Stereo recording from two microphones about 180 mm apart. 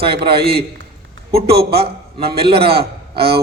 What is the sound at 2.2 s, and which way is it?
A man's voice, 60° right (ahead or behind).